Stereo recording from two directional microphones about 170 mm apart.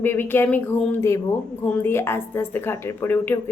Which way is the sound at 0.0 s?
15° left (ahead or behind).